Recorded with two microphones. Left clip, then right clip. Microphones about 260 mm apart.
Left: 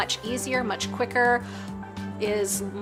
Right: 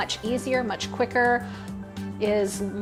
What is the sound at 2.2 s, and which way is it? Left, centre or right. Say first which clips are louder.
Music: right 2 dB; right.